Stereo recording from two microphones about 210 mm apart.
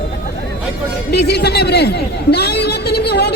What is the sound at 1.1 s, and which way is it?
Chatter, 50° left (ahead or behind).